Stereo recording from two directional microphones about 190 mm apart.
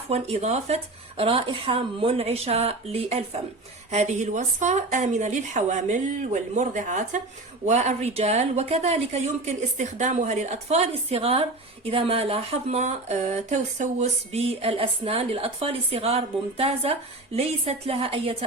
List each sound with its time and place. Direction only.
0.1 s speech: 35° right (ahead or behind)